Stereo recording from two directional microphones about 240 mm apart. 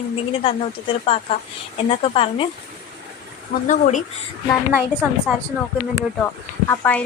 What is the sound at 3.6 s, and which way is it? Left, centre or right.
Speech, left.